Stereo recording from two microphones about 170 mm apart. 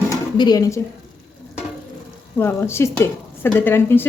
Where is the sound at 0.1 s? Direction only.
25° left (ahead or behind).